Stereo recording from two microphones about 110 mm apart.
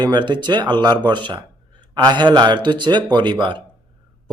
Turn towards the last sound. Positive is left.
turn(degrees=-45)  # may be behind; listen again after turning